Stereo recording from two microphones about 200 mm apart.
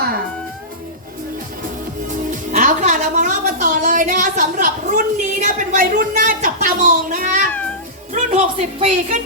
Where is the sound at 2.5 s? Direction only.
40° right (ahead or behind).